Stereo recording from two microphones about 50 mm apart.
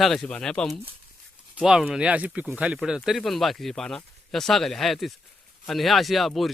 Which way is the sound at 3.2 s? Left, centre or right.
Centre.